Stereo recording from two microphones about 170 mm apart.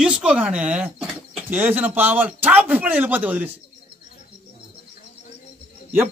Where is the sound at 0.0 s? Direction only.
5° right (ahead or behind).